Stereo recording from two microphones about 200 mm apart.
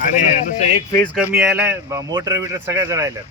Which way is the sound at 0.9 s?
10° left (ahead or behind).